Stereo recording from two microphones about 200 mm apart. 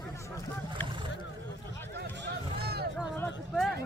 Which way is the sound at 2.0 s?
55° right (ahead or behind).